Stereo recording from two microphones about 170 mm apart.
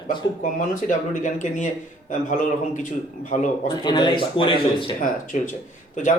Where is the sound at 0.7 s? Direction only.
45° left (ahead or behind).